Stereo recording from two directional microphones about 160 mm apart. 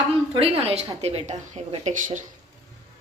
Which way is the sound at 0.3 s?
40° right (ahead or behind).